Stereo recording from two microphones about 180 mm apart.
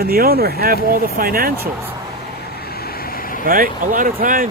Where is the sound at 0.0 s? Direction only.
55° right (ahead or behind).